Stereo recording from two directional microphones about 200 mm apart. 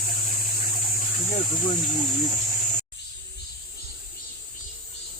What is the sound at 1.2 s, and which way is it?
Speech, 40° left (ahead or behind).